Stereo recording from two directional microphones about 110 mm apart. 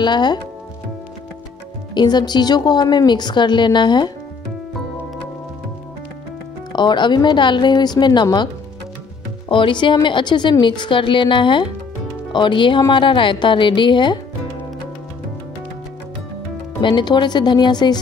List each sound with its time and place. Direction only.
0.0 s speech: 40° left (ahead or behind)
2.0 s a woman's voice: 40° left (ahead or behind)
6.7 s speech: 45° left (ahead or behind)
9.5 s speech: 50° left (ahead or behind)
16.8 s a woman's voice: 40° left (ahead or behind)